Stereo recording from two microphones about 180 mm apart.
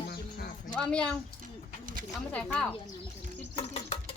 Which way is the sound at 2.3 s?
5° left (ahead or behind).